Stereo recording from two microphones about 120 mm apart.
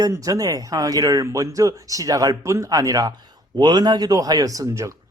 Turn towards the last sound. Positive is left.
turn(degrees=-25)  # may be behind; listen again after turning